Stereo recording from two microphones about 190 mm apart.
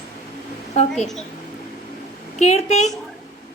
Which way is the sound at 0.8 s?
40° left (ahead or behind).